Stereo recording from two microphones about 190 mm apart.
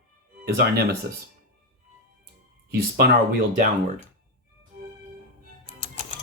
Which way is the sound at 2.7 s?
55° right (ahead or behind).